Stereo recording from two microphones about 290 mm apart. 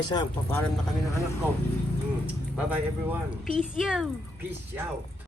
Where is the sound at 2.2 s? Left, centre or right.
Centre.